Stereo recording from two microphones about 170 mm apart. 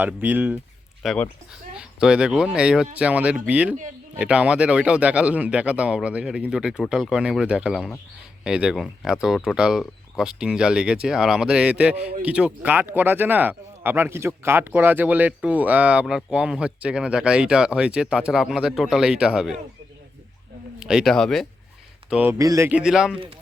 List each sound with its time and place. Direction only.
0.0 s speech: 10° right (ahead or behind)
1.0 s speech: 5° left (ahead or behind)
1.7 s speech: 5° right (ahead or behind)
20.7 s speech: 5° right (ahead or behind)
22.1 s speech: 10° right (ahead or behind)
22.8 s speech: 5° right (ahead or behind)